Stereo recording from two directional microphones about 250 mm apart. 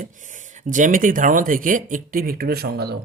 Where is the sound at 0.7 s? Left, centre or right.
Right.